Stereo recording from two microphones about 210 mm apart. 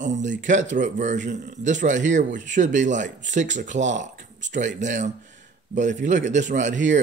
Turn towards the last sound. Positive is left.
turn(degrees=-35)  # may be behind; listen again after turning